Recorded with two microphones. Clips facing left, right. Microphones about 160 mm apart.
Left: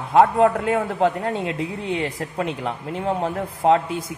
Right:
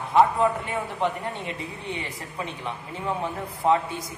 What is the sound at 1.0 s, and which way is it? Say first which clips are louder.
Speech: left 6 dB; 90° left.